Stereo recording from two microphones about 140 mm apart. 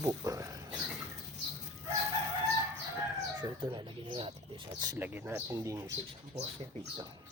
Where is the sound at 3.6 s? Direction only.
35° right (ahead or behind).